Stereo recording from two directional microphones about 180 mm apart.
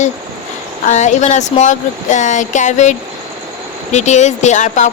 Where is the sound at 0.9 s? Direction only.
40° left (ahead or behind).